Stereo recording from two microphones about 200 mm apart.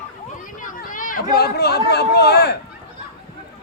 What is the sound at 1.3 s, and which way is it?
Speech, 50° left (ahead or behind).